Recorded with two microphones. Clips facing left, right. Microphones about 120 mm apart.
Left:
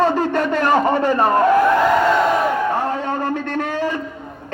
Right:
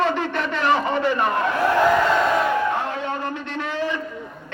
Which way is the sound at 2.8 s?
40° left (ahead or behind).